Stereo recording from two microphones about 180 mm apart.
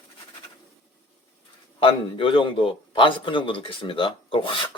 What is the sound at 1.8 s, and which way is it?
A man's voice, 30° left (ahead or behind).